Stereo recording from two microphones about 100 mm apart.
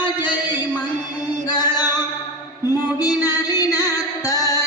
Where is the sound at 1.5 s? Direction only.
45° left (ahead or behind).